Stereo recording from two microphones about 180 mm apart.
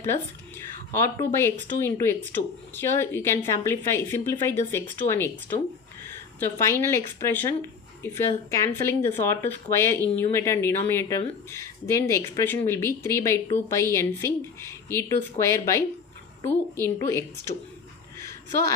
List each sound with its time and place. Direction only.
0.9 s a woman's voice: 15° left (ahead or behind)
6.4 s a woman's voice: 15° left (ahead or behind)
18.2 s a sound: 15° left (ahead or behind)